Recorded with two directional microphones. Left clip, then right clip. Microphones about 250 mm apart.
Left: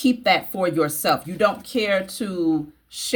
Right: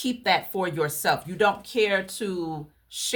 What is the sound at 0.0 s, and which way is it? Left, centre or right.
A woman's voice, centre.